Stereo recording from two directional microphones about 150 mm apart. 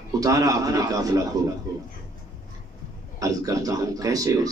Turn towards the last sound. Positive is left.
turn(degrees=-25)  # may be behind; listen again after turning